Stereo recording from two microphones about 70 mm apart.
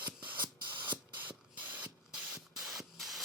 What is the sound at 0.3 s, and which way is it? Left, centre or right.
Spray, right.